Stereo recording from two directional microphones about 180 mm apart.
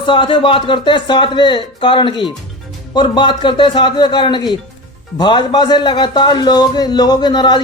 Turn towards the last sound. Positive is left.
turn(degrees=25)  # may be behind; listen again after turning